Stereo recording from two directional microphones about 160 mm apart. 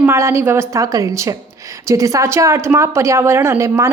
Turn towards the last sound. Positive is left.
turn(degrees=-15)  # may be behind; listen again after turning